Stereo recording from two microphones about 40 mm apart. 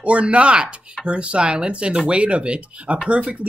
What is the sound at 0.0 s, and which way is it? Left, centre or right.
Speech, right.